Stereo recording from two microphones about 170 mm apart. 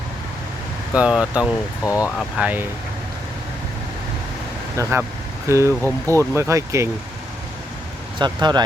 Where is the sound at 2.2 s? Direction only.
5° right (ahead or behind).